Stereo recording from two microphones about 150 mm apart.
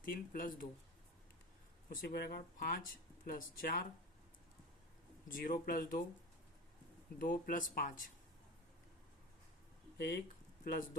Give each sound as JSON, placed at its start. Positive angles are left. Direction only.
{"t": 0.0, "sound": "speech", "side_deg": 70}
{"t": 1.9, "sound": "speech", "side_deg": 85}
{"t": 5.3, "sound": "speech", "side_deg": 70}
{"t": 7.2, "sound": "speech", "side_deg": 65}
{"t": 10.6, "sound": "speech", "side_deg": 65}